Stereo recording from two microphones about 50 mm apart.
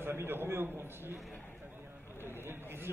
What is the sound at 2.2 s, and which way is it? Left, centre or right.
Speech, left.